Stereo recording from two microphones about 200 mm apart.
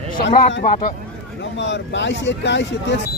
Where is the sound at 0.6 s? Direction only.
40° left (ahead or behind).